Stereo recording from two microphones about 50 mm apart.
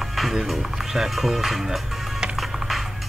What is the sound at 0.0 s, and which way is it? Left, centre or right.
Speech, centre.